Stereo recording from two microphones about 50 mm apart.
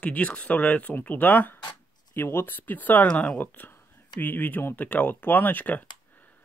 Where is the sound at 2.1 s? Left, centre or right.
Left.